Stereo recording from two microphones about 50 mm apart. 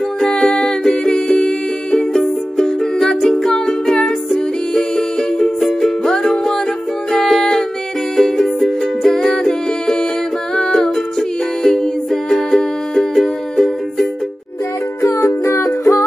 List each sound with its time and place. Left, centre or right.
0.2 s music: centre
15.0 s music: left